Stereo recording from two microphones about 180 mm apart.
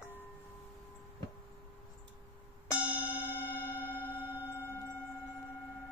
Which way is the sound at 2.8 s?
10° right (ahead or behind).